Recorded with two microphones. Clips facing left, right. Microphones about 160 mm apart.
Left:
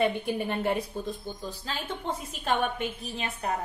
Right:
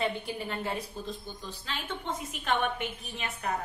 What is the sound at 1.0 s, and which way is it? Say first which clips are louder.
Speech: left 5 dB; 55° left (ahead or behind).